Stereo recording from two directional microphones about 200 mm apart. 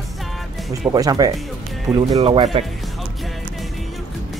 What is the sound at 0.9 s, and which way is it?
Speech, 20° right (ahead or behind).